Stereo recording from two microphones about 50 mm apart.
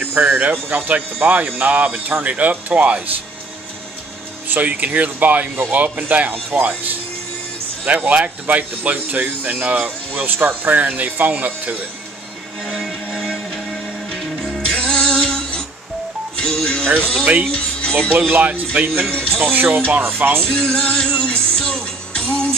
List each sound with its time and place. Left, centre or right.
0.0 s speech: right
4.6 s speech: right
10.1 s speech: right
12.6 s music: centre
16.8 s speech: right
17.5 s speech: centre
18.3 s speech: right
19.0 s speech: centre
19.5 s speech: right
20.4 s music: centre